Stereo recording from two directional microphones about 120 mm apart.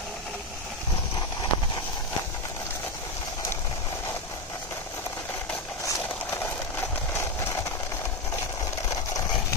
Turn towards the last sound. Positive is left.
turn(degrees=25)  # may be behind; listen again after turning